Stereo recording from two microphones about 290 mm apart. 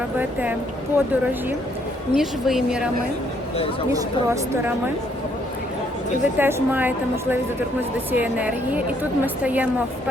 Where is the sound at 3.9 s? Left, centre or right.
Centre.